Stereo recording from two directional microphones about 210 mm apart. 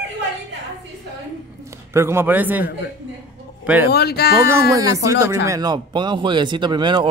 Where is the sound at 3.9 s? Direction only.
50° left (ahead or behind).